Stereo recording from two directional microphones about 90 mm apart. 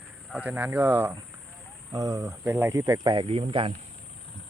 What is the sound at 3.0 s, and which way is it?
Speech, 80° right.